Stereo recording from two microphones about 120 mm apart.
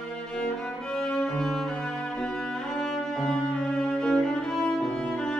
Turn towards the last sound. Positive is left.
turn(degrees=5)  # may be behind; listen again after turning